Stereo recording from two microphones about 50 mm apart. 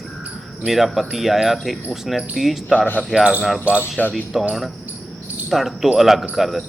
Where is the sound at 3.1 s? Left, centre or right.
Centre.